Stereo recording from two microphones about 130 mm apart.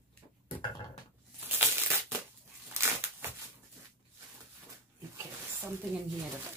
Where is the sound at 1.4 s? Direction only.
15° right (ahead or behind).